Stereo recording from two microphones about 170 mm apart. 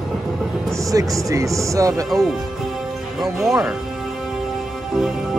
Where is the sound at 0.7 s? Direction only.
20° right (ahead or behind).